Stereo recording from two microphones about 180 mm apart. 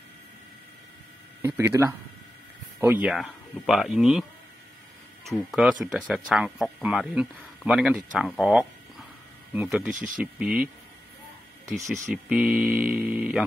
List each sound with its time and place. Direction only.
1.4 s speech: 15° right (ahead or behind)
5.3 s speech: centre (ahead or behind)
8.4 s a sound: 5° right (ahead or behind)
9.5 s speech: 10° right (ahead or behind)
11.6 s speech: 15° right (ahead or behind)
11.9 s speech: 5° right (ahead or behind)